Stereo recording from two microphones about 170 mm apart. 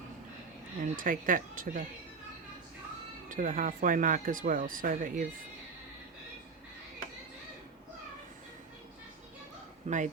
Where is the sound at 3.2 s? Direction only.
50° right (ahead or behind).